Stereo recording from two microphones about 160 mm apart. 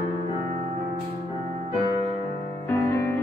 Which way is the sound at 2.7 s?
15° left (ahead or behind).